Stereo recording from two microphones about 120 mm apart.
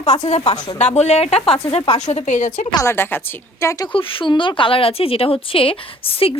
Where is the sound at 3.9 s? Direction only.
45° left (ahead or behind).